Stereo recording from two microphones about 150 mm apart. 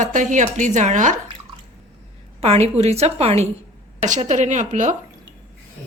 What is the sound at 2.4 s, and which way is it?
A woman's voice, 45° right (ahead or behind).